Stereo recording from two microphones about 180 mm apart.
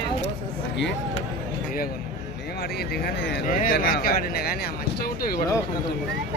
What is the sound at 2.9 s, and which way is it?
Speech, 60° left (ahead or behind).